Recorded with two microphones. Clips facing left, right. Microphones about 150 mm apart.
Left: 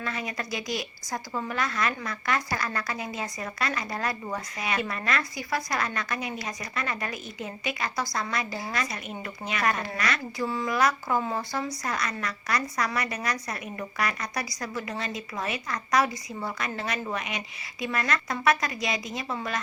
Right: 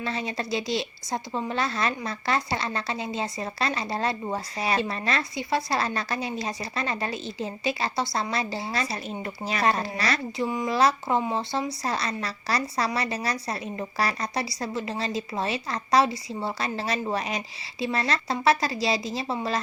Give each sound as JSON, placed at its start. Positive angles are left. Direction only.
{"t": 0.0, "sound": "a woman's voice", "side_deg": -30}